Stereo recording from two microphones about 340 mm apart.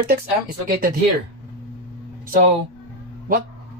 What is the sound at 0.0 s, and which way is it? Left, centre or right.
Speech, right.